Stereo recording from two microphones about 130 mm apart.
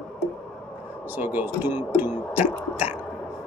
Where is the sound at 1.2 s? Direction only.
15° right (ahead or behind).